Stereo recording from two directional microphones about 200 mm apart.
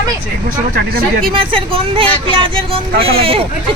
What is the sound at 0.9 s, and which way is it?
Speech, 50° right (ahead or behind).